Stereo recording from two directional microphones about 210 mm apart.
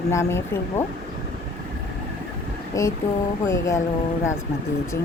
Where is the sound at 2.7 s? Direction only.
15° left (ahead or behind).